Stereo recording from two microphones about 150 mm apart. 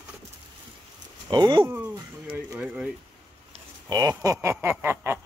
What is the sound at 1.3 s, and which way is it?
Speech, 30° right (ahead or behind).